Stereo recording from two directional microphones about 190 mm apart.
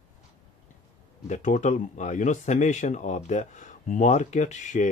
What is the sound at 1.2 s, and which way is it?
Speech, 40° left (ahead or behind).